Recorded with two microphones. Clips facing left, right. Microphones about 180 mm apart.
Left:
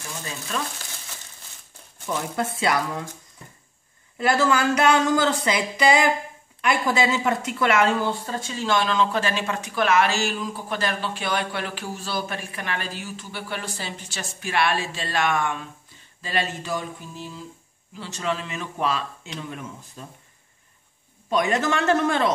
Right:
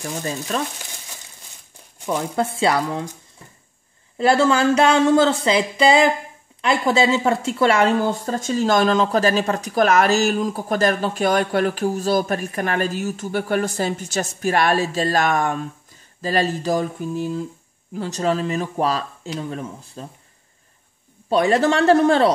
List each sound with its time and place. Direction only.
2.0 s speech: 25° right (ahead or behind)
4.2 s speech: 30° right (ahead or behind)
8.0 s speech: 45° right (ahead or behind)
21.3 s speech: 30° right (ahead or behind)